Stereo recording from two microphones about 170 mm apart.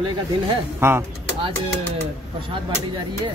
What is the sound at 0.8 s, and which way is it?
Speech, 15° right (ahead or behind).